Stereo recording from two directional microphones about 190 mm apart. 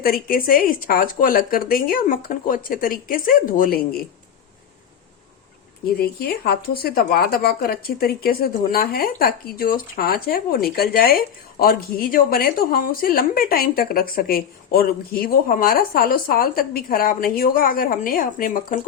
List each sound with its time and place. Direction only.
0.0 s a woman's voice: 50° left (ahead or behind)
6.0 s a woman's voice: 55° left (ahead or behind)